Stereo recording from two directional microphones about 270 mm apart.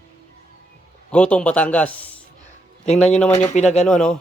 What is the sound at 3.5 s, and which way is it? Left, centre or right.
Speech, left.